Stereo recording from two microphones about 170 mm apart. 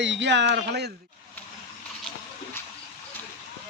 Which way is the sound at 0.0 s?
90° right.